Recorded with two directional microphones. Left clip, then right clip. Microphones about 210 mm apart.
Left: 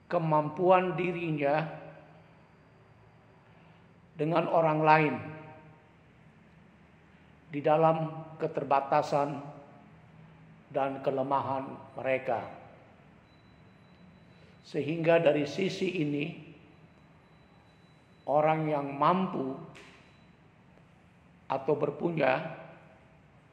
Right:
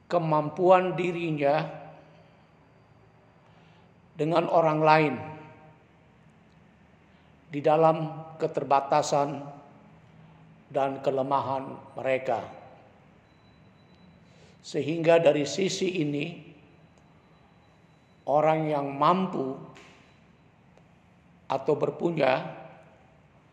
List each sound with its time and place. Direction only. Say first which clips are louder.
0.1 s a man's voice: right 2 dB; 35° right (ahead or behind)
4.2 s a man's voice: right 4 dB; 35° right (ahead or behind)
7.5 s a man's voice: right 3 dB; 35° right (ahead or behind)
10.7 s a man's voice: right 4 dB; 35° right (ahead or behind)
14.6 s a man's voice: right 4 dB; 35° right (ahead or behind)
18.2 s a man's voice: right 3 dB; 35° right (ahead or behind)
21.5 s a man's voice: right 3 dB; 35° right (ahead or behind)